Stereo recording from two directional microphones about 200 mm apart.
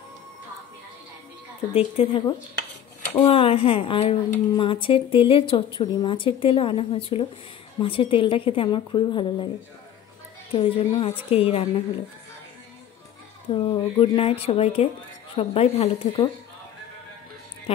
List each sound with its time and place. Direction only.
1.7 s a woman's voice: 30° left (ahead or behind)
10.5 s a woman's voice: 30° left (ahead or behind)
13.5 s a woman's voice: 25° left (ahead or behind)